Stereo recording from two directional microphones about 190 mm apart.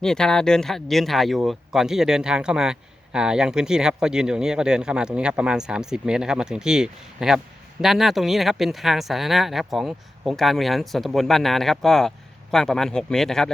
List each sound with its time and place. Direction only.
0.0 s speech: 5° left (ahead or behind)